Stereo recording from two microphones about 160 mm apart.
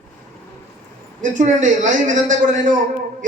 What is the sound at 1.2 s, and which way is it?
A man's voice, 50° right (ahead or behind).